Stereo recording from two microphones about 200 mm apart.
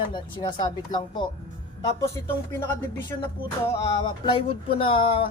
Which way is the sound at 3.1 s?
15° left (ahead or behind).